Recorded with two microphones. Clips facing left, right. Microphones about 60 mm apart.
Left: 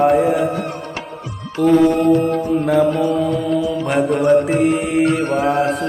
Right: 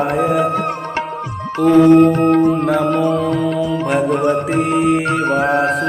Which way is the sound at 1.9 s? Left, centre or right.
Right.